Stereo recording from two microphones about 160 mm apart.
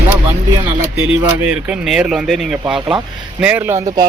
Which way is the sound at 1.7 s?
5° right (ahead or behind).